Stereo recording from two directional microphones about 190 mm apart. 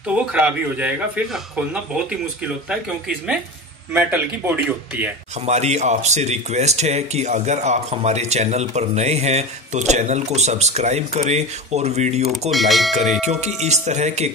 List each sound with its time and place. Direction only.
0.0 s speech: 5° right (ahead or behind)
3.9 s speech: 10° right (ahead or behind)
5.4 s speech: 35° right (ahead or behind)
12.3 s speech: centre (ahead or behind)
13.2 s speech: 35° right (ahead or behind)